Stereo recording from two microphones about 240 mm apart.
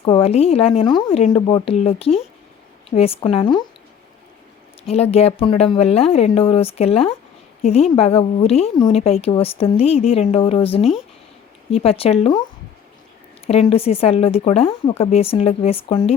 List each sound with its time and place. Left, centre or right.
0.0 s a woman's voice: left
5.1 s a woman's voice: left
13.5 s a woman's voice: left